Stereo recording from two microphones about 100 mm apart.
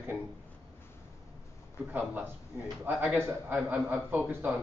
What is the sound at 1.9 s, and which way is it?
A man's voice, 15° right (ahead or behind).